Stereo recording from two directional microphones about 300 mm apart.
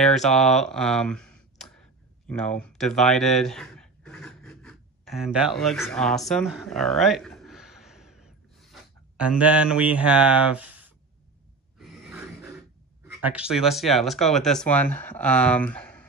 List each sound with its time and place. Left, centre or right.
0.0 s a sound: centre
11.8 s gasp: centre
13.0 s speech: centre